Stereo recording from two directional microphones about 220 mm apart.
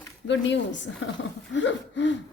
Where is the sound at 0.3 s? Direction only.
55° left (ahead or behind).